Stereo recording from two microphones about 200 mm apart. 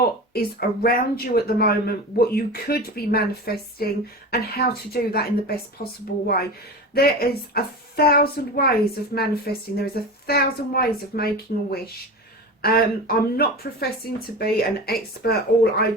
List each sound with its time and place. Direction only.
0.3 s speech: 50° left (ahead or behind)
12.6 s speech: 50° left (ahead or behind)